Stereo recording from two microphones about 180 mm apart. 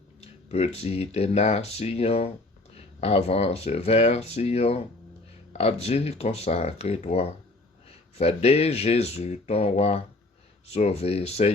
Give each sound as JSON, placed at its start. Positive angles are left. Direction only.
{"t": 0.2, "sound": "speech", "side_deg": 35}